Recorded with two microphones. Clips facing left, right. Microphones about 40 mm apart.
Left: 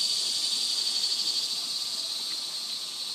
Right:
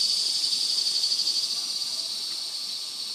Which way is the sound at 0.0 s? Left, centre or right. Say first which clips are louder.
Right 2 dB; left.